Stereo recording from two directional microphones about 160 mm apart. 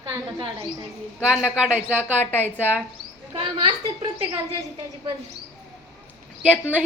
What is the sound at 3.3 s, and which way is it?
Speech, 35° right (ahead or behind).